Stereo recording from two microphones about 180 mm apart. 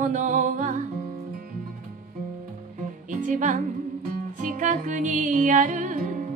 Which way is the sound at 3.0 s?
45° right (ahead or behind).